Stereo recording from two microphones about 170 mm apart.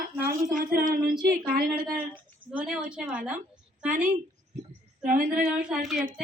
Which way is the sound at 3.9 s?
50° right (ahead or behind).